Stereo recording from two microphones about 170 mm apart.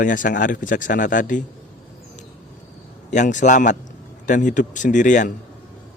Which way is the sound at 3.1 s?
45° left (ahead or behind).